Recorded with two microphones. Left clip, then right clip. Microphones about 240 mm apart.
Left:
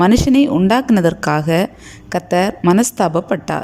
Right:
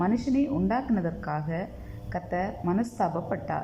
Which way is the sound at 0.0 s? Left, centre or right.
Left.